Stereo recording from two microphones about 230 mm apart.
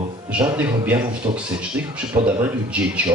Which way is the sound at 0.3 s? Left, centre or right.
Centre.